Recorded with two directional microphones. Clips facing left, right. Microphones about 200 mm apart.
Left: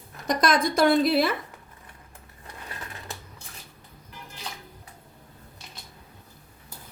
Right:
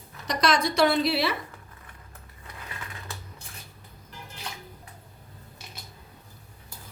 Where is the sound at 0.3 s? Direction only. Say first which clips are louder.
Left 2 dB; 50° left (ahead or behind).